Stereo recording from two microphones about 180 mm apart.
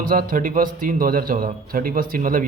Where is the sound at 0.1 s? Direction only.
50° right (ahead or behind).